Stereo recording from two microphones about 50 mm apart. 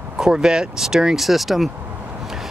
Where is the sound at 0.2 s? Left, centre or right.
Centre.